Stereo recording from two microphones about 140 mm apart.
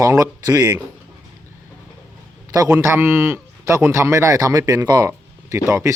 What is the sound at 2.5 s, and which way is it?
A man's voice, 25° right (ahead or behind).